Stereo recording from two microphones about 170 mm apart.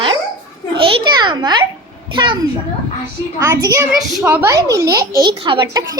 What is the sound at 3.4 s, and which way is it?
A child's voice, 20° right (ahead or behind).